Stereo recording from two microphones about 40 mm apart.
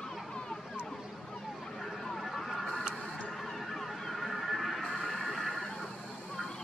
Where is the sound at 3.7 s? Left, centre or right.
Centre.